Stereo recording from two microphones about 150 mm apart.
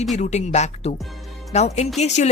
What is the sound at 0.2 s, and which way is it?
Speech, 50° left (ahead or behind).